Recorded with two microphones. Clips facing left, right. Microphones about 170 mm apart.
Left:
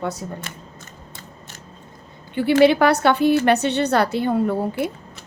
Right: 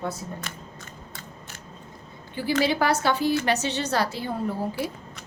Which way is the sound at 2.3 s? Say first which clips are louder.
Left 9 dB; 65° left (ahead or behind).